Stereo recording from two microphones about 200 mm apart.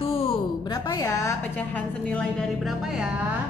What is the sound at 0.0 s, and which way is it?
A woman's voice, 30° left (ahead or behind).